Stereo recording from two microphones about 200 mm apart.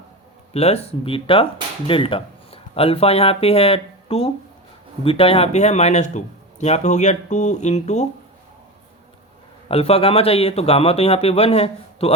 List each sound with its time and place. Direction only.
0.5 s a man's voice: 30° left (ahead or behind)
9.6 s a man's voice: 30° left (ahead or behind)